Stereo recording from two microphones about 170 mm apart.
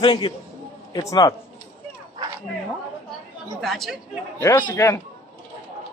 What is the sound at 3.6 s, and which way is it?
Speech, centre (ahead or behind).